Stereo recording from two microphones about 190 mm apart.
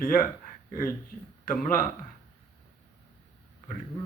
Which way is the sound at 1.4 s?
45° left (ahead or behind).